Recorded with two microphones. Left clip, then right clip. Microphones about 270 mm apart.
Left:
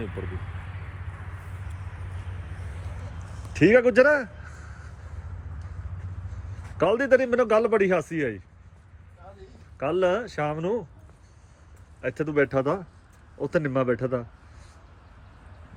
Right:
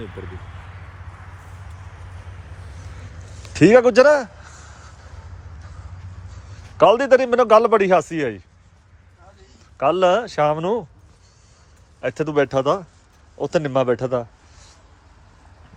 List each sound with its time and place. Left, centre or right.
3.5 s a sound: right
6.7 s speech: centre
9.7 s speech: centre
11.9 s speech: centre